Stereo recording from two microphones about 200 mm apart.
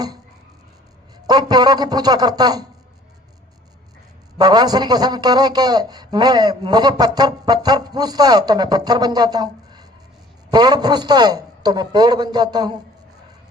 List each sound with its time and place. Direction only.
1.3 s a man's voice: 20° right (ahead or behind)
4.4 s a man's voice: 20° right (ahead or behind)